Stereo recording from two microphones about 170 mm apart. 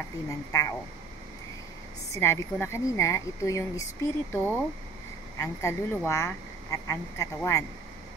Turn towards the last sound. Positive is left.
turn(degrees=20)  # may be behind; listen again after turning